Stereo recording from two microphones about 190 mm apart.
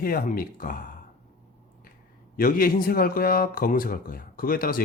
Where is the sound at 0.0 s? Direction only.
50° left (ahead or behind).